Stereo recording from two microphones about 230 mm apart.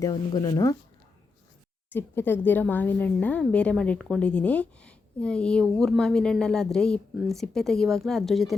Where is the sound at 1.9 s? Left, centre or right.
Centre.